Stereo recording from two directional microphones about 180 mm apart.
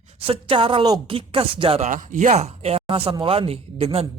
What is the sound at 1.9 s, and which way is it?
A woman's voice, 45° right (ahead or behind).